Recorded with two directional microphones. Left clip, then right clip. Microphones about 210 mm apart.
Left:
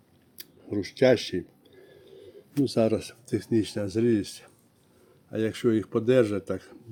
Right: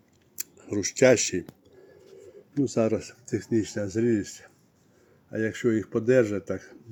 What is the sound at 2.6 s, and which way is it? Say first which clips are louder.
Speech: left 1 dB; 15° left (ahead or behind).